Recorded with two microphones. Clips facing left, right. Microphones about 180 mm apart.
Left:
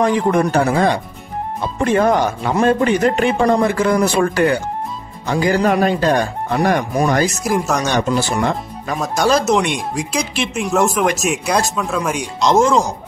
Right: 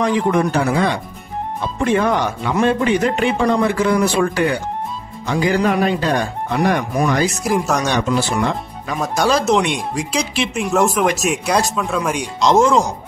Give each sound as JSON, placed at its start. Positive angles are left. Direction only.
{"t": 0.0, "sound": "speech", "side_deg": 45}
{"t": 7.3, "sound": "speech", "side_deg": 0}
{"t": 8.1, "sound": "speech", "side_deg": 45}
{"t": 9.0, "sound": "speech", "side_deg": 0}